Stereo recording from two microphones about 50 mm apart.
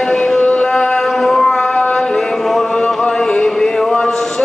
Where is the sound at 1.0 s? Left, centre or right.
Centre.